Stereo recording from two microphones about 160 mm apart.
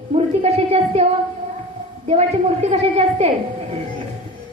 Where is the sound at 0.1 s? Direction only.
40° right (ahead or behind).